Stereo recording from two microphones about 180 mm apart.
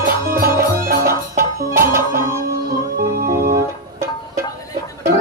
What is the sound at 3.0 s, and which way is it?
Music, 55° right (ahead or behind).